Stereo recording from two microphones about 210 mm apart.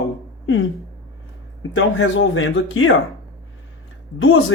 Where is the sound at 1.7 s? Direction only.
70° left (ahead or behind).